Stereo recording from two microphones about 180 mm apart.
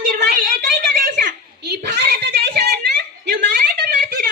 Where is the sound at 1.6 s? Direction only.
70° right (ahead or behind).